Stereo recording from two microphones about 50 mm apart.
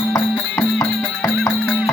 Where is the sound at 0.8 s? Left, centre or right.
Left.